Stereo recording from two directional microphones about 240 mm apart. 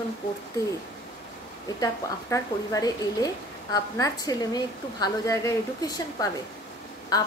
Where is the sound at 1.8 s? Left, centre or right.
Centre.